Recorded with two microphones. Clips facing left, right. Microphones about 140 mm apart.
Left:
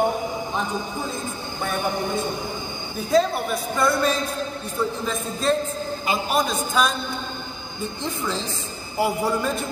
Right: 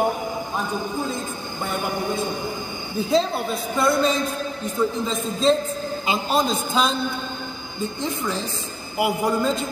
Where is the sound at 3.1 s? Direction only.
25° right (ahead or behind).